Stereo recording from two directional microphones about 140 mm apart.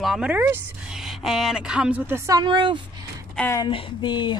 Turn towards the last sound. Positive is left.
turn(degrees=30)  # may be behind; listen again after turning